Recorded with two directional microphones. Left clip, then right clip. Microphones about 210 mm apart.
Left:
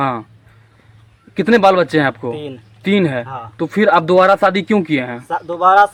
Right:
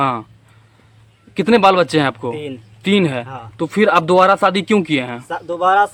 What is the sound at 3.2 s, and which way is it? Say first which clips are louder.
Speech: left 4 dB; 15° right (ahead or behind).